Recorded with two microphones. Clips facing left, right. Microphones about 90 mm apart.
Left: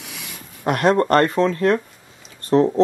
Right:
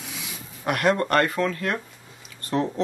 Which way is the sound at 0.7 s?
30° left (ahead or behind).